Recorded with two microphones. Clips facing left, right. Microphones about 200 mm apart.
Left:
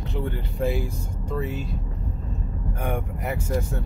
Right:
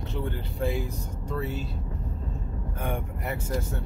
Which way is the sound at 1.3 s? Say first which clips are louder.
Left 3 dB; 10° left (ahead or behind).